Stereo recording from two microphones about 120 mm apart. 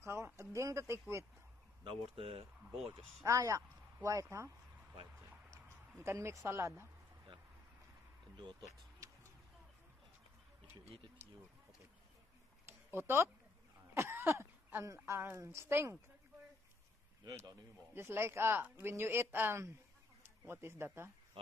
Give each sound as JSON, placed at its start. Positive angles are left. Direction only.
{"t": 0.0, "sound": "speech", "side_deg": -20}
{"t": 1.9, "sound": "speech", "side_deg": -50}
{"t": 3.3, "sound": "speech", "side_deg": -25}
{"t": 5.5, "sound": "speech", "side_deg": -20}
{"t": 8.4, "sound": "speech", "side_deg": -35}
{"t": 11.2, "sound": "a sound", "side_deg": -20}
{"t": 12.6, "sound": "a sound", "side_deg": -20}
{"t": 13.9, "sound": "a woman's voice", "side_deg": -20}
{"t": 17.9, "sound": "speech", "side_deg": -20}